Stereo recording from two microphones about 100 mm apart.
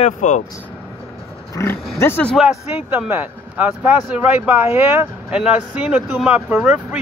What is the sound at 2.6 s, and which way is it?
Speech, 20° right (ahead or behind).